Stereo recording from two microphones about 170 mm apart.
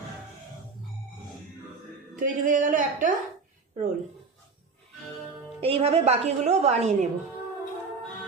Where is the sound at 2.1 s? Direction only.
50° right (ahead or behind).